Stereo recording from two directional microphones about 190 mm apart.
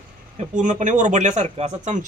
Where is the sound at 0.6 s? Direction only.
40° right (ahead or behind).